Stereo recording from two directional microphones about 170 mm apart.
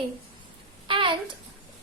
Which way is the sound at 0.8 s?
30° right (ahead or behind).